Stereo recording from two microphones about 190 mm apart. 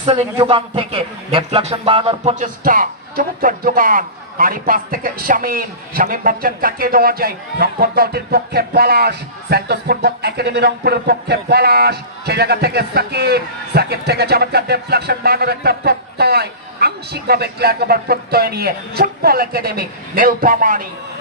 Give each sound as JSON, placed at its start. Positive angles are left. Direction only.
{"t": 0.0, "sound": "a man's voice", "side_deg": -30}
{"t": 2.3, "sound": "speech", "side_deg": -45}